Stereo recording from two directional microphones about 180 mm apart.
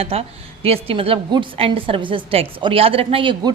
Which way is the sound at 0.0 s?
35° right (ahead or behind).